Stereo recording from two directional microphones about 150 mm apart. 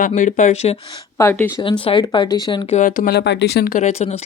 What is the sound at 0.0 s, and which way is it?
Speech, 55° left (ahead or behind).